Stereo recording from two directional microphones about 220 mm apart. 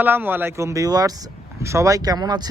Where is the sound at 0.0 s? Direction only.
10° right (ahead or behind).